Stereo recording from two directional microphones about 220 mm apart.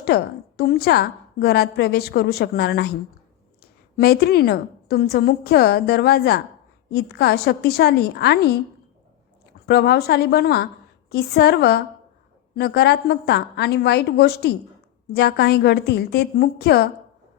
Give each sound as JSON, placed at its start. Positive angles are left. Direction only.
{"t": 0.0, "sound": "a woman's voice", "side_deg": 45}
{"t": 9.6, "sound": "a woman's voice", "side_deg": 45}